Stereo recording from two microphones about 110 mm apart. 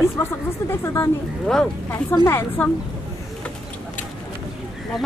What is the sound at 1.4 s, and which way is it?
Speech, 5° left (ahead or behind).